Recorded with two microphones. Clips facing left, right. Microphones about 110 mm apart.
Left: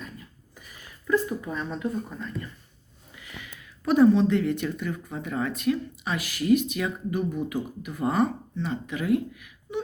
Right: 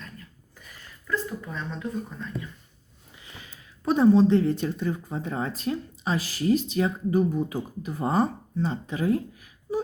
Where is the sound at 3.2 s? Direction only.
30° right (ahead or behind).